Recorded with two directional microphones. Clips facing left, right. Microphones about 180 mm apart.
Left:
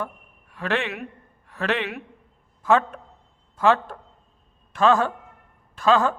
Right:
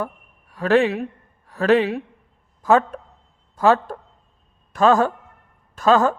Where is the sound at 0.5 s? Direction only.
40° right (ahead or behind).